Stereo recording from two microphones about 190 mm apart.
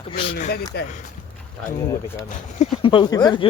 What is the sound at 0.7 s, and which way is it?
Speech, 55° left (ahead or behind).